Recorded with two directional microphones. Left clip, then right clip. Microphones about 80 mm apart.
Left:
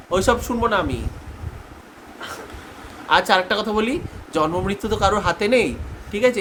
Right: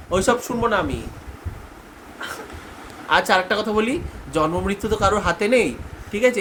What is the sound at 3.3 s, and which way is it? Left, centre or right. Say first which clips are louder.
Speech: even; centre.